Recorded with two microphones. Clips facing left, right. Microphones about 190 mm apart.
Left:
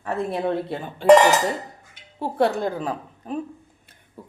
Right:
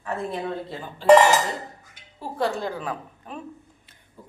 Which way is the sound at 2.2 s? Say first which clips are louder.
Left 5 dB; 60° left (ahead or behind).